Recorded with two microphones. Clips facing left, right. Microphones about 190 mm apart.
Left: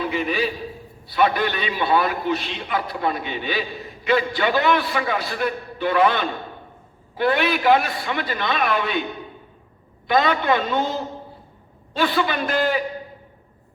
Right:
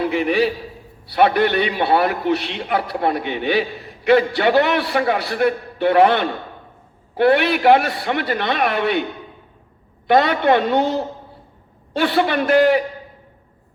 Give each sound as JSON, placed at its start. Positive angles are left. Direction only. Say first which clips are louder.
{"t": 0.0, "sound": "a man's voice", "louder": "right 5 dB", "side_deg": -65}
{"t": 10.1, "sound": "a man's voice", "louder": "right 4 dB", "side_deg": -65}